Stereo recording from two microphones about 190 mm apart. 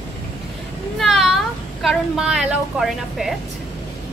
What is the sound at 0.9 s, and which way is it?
A woman's voice, centre (ahead or behind).